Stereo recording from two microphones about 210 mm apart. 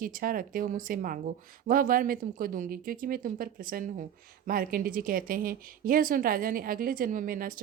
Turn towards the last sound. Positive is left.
turn(degrees=-40)  # may be behind; listen again after turning